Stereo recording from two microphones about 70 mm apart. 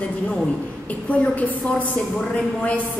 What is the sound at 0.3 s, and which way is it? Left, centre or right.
A woman's voice, centre.